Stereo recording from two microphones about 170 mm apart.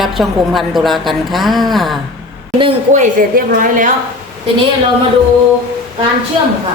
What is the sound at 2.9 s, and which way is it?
A woman's voice, 50° right (ahead or behind).